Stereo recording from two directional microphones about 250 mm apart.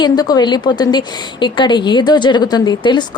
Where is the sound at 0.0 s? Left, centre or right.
Centre.